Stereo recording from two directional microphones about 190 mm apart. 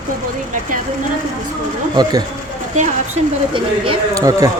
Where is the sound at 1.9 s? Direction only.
20° right (ahead or behind).